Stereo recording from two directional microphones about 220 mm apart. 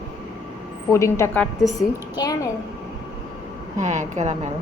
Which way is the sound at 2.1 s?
15° left (ahead or behind).